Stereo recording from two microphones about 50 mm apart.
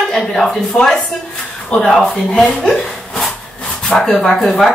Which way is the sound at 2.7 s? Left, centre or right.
Centre.